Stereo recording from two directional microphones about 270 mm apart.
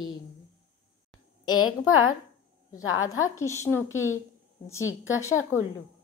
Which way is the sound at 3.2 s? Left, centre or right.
Centre.